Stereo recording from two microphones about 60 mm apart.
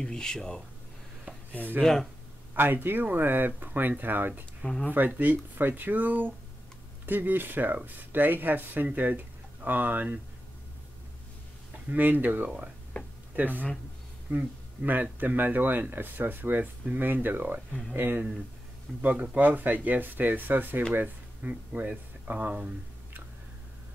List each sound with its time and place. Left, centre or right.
0.0 s speech: centre
1.8 s speech: centre
2.5 s speech: right
11.9 s speech: right
12.9 s a sound: left
13.4 s speech: right
18.9 s speech: right